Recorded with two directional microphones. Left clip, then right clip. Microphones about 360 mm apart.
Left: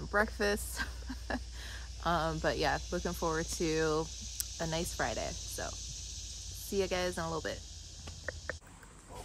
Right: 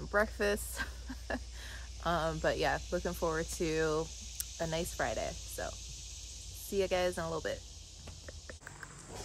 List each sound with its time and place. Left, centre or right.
0.0 s speech: centre